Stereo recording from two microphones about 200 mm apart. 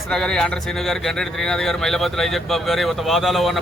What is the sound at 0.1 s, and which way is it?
Speech, 5° left (ahead or behind).